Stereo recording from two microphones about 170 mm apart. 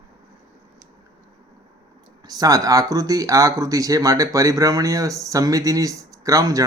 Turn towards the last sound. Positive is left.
turn(degrees=-20)  # may be behind; listen again after turning